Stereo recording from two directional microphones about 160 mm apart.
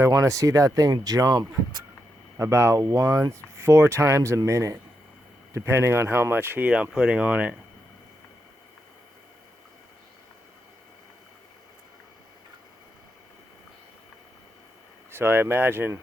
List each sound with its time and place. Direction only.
0.0 s speech: 20° right (ahead or behind)
15.1 s speech: 15° right (ahead or behind)